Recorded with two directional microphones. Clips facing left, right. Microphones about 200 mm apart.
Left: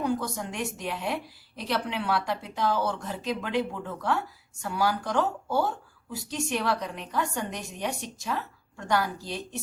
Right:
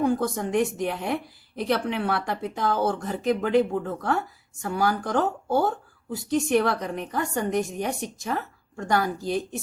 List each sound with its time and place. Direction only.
0.0 s a woman's voice: 50° right (ahead or behind)